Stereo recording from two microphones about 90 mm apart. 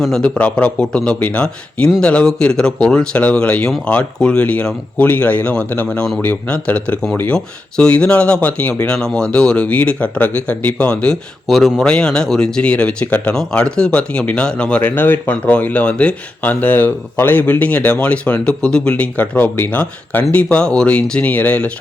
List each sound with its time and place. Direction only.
0.0 s speech: 10° left (ahead or behind)
8.9 s speech: 5° left (ahead or behind)
13.3 s speech: 5° left (ahead or behind)